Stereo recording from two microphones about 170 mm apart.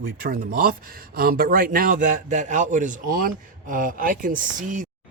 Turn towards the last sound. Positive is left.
turn(degrees=-50)  # may be behind; listen again after turning